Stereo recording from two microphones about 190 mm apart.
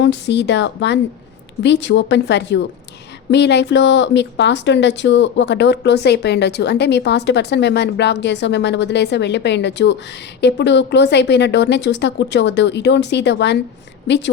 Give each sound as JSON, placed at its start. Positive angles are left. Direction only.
{"t": 0.0, "sound": "speech", "side_deg": 65}